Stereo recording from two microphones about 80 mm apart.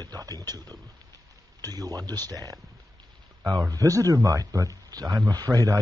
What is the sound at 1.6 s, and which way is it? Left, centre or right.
Speech, right.